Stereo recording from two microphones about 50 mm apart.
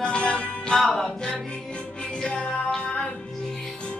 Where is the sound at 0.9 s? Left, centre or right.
Centre.